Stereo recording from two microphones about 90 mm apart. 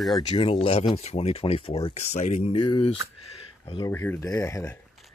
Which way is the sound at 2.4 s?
70° left (ahead or behind).